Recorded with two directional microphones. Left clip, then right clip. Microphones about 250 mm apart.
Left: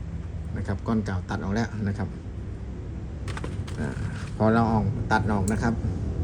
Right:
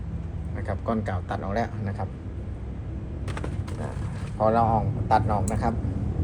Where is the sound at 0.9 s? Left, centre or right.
Left.